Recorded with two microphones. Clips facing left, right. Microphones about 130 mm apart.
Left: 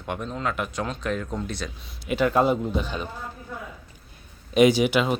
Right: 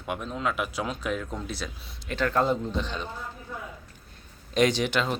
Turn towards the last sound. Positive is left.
turn(degrees=10)  # may be behind; listen again after turning